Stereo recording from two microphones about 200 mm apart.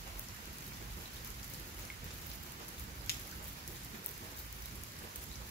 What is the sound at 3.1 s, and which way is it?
Rain, 50° left (ahead or behind).